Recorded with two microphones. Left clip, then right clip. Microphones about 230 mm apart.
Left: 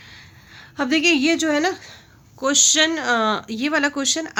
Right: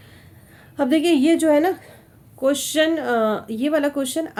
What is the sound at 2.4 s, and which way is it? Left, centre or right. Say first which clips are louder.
Speech: left 2 dB; centre.